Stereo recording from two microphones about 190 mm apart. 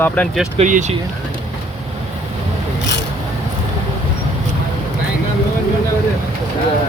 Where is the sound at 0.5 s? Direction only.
40° right (ahead or behind).